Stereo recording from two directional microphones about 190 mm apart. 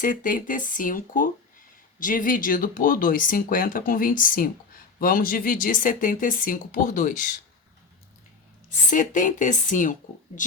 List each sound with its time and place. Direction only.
0.0 s speech: 45° left (ahead or behind)
8.9 s speech: 45° left (ahead or behind)